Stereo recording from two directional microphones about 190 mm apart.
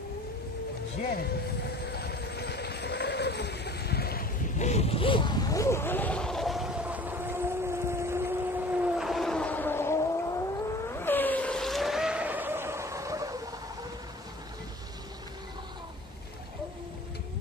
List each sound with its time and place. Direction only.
1.9 s vehicle: 55° left (ahead or behind); by 13.4 s 15° right (ahead or behind)